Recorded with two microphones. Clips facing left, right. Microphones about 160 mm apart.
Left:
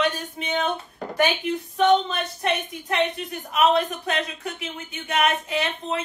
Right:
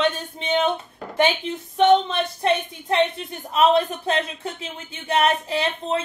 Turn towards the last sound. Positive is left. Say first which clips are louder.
# right 3 dB
turn(degrees=-30)  # may be behind; listen again after turning